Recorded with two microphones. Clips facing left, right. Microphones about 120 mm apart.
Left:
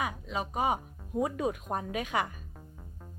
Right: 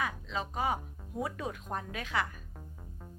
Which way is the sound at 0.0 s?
15° left (ahead or behind).